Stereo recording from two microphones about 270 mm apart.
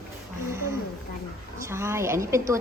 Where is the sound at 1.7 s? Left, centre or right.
Centre.